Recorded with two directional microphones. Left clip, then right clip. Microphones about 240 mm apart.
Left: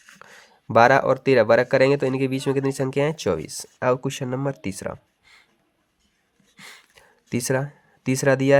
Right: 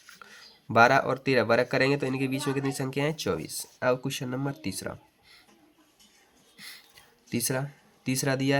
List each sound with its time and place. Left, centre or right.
0.2 s speech: left
6.6 s a sound: left
7.3 s speech: left